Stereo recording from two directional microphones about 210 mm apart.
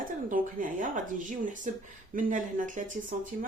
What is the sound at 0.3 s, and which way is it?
Speech, 40° right (ahead or behind).